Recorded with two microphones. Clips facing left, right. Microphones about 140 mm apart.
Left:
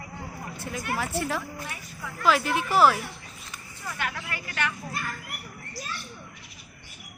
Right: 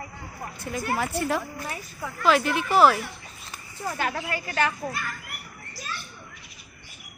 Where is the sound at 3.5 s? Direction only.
35° right (ahead or behind).